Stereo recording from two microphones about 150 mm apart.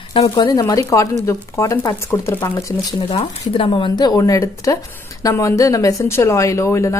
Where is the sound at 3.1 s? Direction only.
35° left (ahead or behind).